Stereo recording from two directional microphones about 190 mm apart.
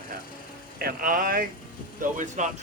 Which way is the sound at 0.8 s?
50° right (ahead or behind).